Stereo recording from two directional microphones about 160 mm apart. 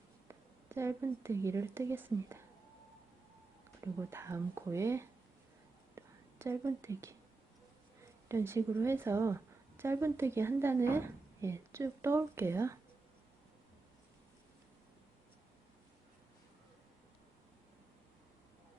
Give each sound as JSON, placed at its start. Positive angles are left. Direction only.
{"t": 0.3, "sound": "speech", "side_deg": -15}
{"t": 4.1, "sound": "a woman's voice", "side_deg": -15}
{"t": 6.4, "sound": "a woman's voice", "side_deg": -15}
{"t": 8.3, "sound": "a woman's voice", "side_deg": -15}